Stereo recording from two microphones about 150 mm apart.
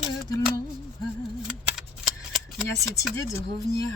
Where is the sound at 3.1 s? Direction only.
20° left (ahead or behind).